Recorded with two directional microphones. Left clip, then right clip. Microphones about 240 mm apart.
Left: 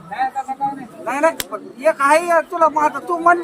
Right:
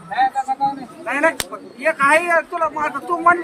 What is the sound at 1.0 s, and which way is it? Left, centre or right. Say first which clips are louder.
Speech: left 1 dB; left.